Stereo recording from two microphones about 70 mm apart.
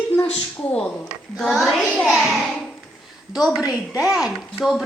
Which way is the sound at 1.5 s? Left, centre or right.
Centre.